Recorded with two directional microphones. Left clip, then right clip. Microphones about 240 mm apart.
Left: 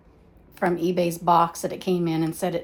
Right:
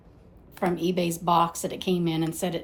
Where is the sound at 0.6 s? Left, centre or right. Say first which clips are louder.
Left 3 dB; centre.